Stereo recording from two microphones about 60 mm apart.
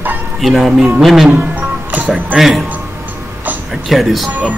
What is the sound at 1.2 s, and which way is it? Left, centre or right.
Music, right.